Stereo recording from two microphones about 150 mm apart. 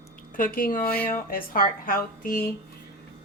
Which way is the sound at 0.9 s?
10° left (ahead or behind).